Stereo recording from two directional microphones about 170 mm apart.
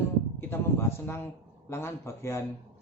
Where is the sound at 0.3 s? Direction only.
15° left (ahead or behind).